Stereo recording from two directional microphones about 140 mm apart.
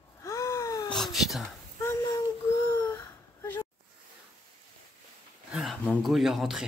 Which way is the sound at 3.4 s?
15° left (ahead or behind).